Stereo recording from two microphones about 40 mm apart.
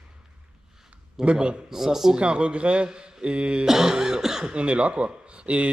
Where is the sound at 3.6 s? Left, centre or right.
Centre.